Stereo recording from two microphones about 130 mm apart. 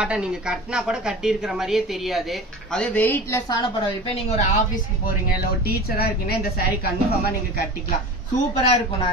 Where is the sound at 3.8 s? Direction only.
50° left (ahead or behind).